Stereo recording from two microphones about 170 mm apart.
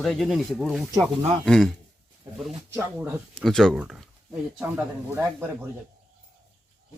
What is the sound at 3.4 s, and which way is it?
Speech, centre (ahead or behind).